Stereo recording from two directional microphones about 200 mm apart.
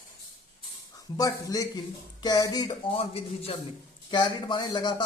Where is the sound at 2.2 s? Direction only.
20° left (ahead or behind).